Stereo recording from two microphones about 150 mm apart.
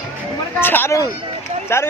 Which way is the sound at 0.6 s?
15° left (ahead or behind).